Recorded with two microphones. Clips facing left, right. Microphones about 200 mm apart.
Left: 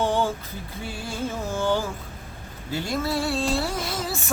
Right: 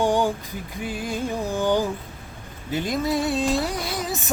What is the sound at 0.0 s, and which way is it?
Music, 15° right (ahead or behind).